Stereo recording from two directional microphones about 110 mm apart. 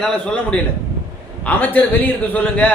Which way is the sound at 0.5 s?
10° left (ahead or behind).